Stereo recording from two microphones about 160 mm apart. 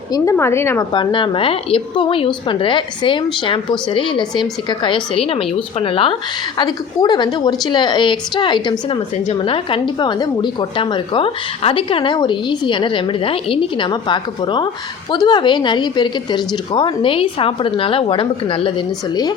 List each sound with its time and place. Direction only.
0.1 s a woman's voice: 15° left (ahead or behind)
0.9 s a woman's voice: 30° left (ahead or behind)